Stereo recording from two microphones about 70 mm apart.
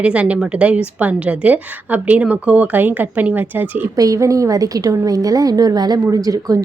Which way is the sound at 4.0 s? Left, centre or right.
Right.